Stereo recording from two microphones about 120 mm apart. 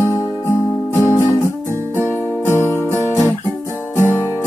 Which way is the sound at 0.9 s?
20° left (ahead or behind).